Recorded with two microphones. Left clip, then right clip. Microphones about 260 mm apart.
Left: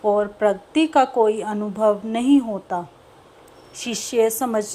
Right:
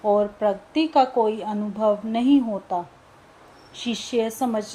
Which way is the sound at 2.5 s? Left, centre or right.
Left.